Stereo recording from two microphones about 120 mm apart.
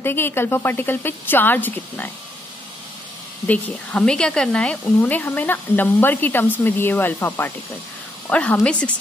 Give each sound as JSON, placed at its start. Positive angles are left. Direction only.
{"t": 0.0, "sound": "speech", "side_deg": 20}
{"t": 3.4, "sound": "speech", "side_deg": 10}